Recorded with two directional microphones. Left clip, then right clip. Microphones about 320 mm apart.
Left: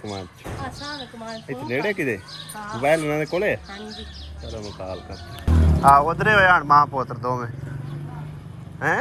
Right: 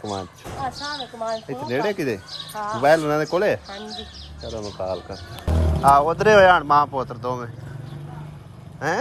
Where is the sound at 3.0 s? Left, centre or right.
Right.